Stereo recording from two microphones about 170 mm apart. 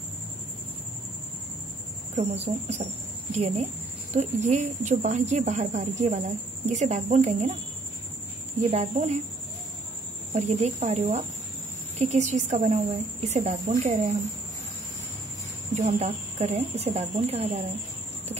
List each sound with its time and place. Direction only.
2.1 s a woman's voice: 40° right (ahead or behind)
8.6 s speech: 40° right (ahead or behind)
10.3 s a woman's voice: 40° right (ahead or behind)
15.7 s speech: 40° right (ahead or behind)